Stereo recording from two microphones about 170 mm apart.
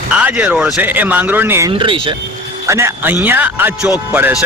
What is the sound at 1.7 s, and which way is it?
Speech, 30° right (ahead or behind).